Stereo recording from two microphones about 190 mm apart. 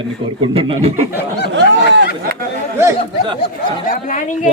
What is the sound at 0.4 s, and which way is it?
Speech, 30° right (ahead or behind).